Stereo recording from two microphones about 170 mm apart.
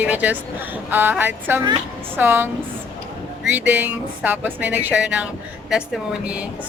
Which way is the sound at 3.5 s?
10° right (ahead or behind).